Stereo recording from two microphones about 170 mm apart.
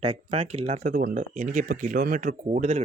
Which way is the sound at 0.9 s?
55° right (ahead or behind).